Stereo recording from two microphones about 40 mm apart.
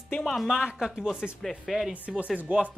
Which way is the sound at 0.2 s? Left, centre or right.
Centre.